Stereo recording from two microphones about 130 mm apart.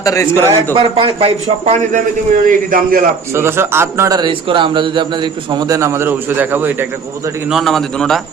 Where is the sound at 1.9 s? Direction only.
85° right.